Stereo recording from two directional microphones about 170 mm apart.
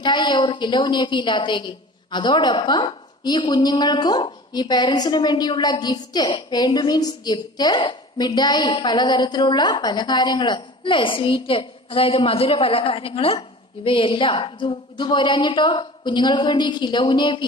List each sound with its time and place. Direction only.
0.0 s a woman's voice: 25° left (ahead or behind)